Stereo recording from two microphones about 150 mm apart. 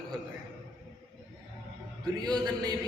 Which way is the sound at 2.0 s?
25° right (ahead or behind).